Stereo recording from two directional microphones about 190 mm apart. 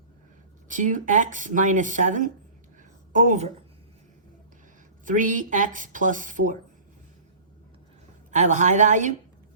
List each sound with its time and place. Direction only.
0.7 s a woman's voice: 40° right (ahead or behind)
5.0 s speech: 45° right (ahead or behind)
8.3 s speech: 40° right (ahead or behind)